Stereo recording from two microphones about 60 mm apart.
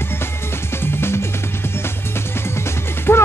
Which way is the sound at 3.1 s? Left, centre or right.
Left.